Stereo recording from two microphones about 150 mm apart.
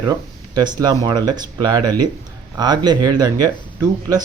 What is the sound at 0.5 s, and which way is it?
Speech, 30° right (ahead or behind).